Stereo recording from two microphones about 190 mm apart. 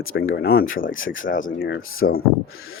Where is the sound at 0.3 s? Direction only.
60° left (ahead or behind).